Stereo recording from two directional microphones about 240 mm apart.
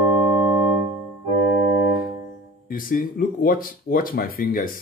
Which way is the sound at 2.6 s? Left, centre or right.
Left.